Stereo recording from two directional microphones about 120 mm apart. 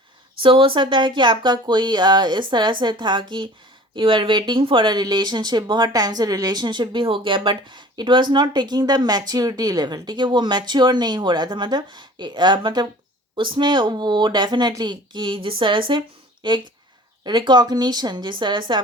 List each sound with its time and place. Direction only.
0.4 s speech: 45° right (ahead or behind)